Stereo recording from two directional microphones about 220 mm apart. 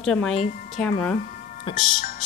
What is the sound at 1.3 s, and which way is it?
Music, 35° left (ahead or behind).